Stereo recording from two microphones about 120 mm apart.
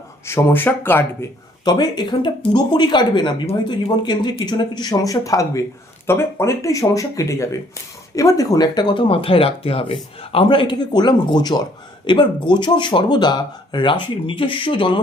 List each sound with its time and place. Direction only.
0.3 s speech: 20° left (ahead or behind)
1.6 s speech: 35° left (ahead or behind)